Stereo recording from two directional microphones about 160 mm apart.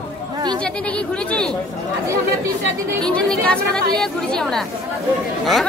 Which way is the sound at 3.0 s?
5° left (ahead or behind).